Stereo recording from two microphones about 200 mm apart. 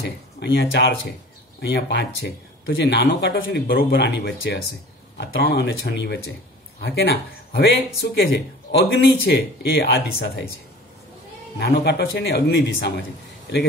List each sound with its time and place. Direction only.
0.0 s speech: 55° left (ahead or behind)
11.5 s speech: 55° left (ahead or behind)